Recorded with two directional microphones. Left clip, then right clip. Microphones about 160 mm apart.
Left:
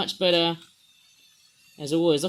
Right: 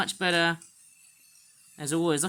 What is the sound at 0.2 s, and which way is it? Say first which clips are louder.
Speech: left 4 dB; 70° right (ahead or behind).